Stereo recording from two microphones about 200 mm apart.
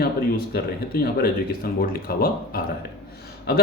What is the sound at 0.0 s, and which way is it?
Speech, 50° left (ahead or behind).